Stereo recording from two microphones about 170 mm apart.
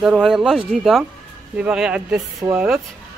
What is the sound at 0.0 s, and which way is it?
Speech, centre (ahead or behind).